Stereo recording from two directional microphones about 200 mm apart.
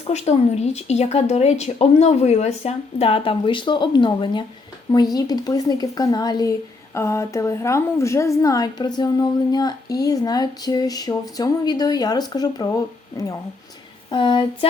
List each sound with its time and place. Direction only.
0.1 s a woman's voice: 35° left (ahead or behind)